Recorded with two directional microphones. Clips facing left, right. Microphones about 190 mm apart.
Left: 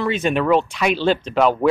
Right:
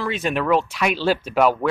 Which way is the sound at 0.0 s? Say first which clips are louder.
Left 4 dB; centre (ahead or behind).